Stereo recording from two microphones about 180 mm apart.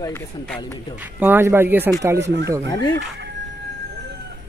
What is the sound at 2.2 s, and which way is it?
Speech, 75° right (ahead or behind).